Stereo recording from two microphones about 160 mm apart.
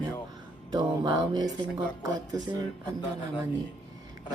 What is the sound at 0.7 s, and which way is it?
Music, 25° right (ahead or behind).